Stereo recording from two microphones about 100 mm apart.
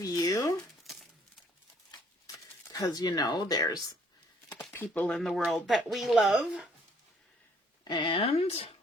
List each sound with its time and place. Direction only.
0.0 s a sound: 40° left (ahead or behind)
1.9 s shuffling cards: 35° left (ahead or behind)
3.6 s speech: 40° left (ahead or behind)
4.7 s speech: 20° left (ahead or behind)
5.0 s speech: centre (ahead or behind)
7.9 s speech: 50° left (ahead or behind); by 8.7 s 80° left